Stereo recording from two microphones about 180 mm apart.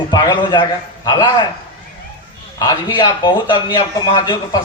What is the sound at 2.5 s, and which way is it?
Speech, 25° left (ahead or behind).